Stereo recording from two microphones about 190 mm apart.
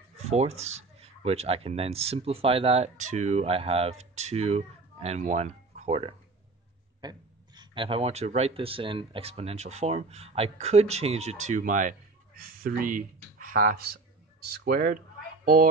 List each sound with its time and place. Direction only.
0.3 s speech: 35° right (ahead or behind)
7.0 s speech: 20° right (ahead or behind); by 15.7 s 45° right (ahead or behind)